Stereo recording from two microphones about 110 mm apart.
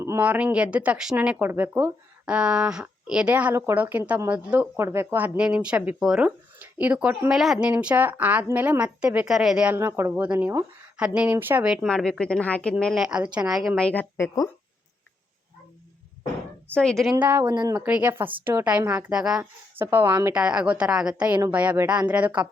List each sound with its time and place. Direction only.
0.2 s speech: 15° right (ahead or behind)
4.8 s speech: 25° right (ahead or behind)
5.4 s speech: 10° right (ahead or behind)
9.7 s speech: 20° right (ahead or behind)
11.6 s speech: 5° right (ahead or behind)
11.9 s speech: 5° left (ahead or behind)
12.8 s a woman's voice: centre (ahead or behind)
13.8 s speech: 15° left (ahead or behind)
16.7 s a woman's voice: 5° left (ahead or behind)
17.2 s speech: 20° right (ahead or behind)
17.4 s speech: 40° right (ahead or behind)
17.7 s speech: 10° right (ahead or behind)
19.4 s speech: 20° right (ahead or behind)
20.3 s speech: 10° right (ahead or behind)